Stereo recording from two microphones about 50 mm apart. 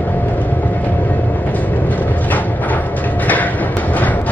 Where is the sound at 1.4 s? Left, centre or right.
Left.